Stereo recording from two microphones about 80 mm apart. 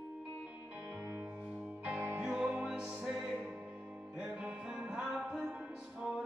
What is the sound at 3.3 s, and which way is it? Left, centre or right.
Music, centre.